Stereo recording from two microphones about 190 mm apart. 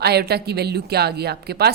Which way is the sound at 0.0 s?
55° right (ahead or behind).